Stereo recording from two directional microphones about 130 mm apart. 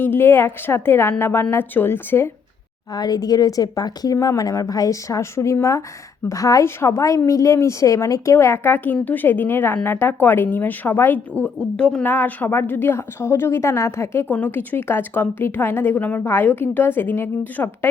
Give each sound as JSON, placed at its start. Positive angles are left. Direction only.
{"t": 0.0, "sound": "speech", "side_deg": 15}
{"t": 2.9, "sound": "a woman's voice", "side_deg": 30}